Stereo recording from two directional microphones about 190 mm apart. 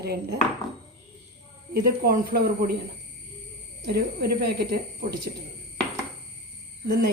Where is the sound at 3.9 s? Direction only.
55° right (ahead or behind).